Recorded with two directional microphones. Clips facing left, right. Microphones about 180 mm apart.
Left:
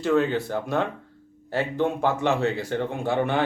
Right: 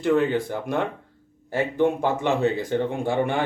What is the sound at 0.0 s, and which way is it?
Speech, 15° right (ahead or behind).